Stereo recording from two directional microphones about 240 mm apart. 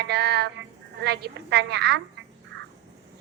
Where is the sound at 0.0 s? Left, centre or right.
Right.